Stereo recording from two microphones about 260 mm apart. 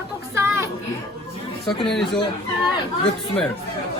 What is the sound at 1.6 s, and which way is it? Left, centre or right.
Speech, centre.